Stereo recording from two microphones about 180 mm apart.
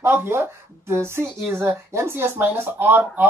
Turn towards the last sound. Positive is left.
turn(degrees=-10)  # may be behind; listen again after turning